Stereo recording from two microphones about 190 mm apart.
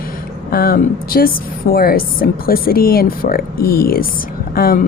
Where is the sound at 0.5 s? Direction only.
50° left (ahead or behind).